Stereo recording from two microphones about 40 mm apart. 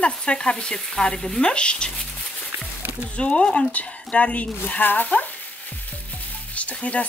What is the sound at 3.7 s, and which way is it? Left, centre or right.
Speech, left.